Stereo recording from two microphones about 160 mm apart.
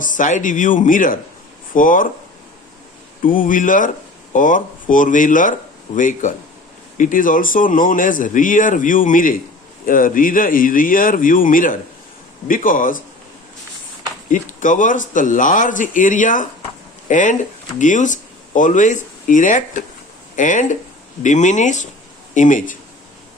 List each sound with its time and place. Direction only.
0.0 s speech: 55° left (ahead or behind)
3.2 s speech: 60° left (ahead or behind)
14.3 s speech: 55° left (ahead or behind)